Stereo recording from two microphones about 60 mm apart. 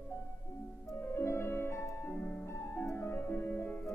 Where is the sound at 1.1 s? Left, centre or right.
Left.